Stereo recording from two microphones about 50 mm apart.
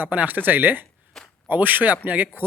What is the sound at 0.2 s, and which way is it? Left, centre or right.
A man's voice, right.